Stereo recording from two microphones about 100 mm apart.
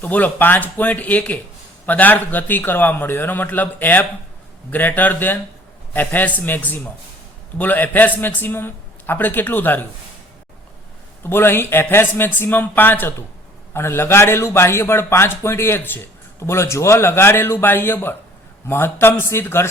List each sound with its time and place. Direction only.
0.0 s a man's voice: 15° left (ahead or behind)
11.2 s a man's voice: 25° left (ahead or behind)